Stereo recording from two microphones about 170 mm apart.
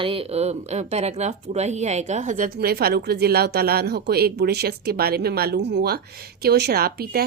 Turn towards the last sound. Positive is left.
turn(degrees=-65)  # may be behind; listen again after turning